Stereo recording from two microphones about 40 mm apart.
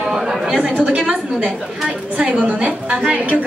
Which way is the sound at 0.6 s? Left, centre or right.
Right.